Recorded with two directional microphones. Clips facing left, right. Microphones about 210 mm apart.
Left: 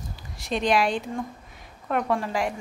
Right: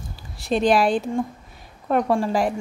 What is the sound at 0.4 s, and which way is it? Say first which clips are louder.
A woman's voice: right 5 dB; 35° right (ahead or behind).